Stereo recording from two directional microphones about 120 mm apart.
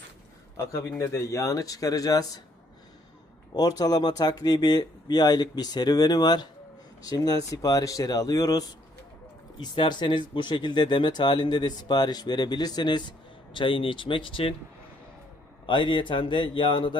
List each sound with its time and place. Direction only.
0.5 s speech: 25° left (ahead or behind)
3.5 s speech: 35° left (ahead or behind)
15.6 s speech: 40° left (ahead or behind)